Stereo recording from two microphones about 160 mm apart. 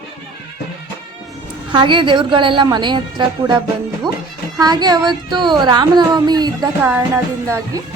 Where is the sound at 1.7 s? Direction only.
30° right (ahead or behind).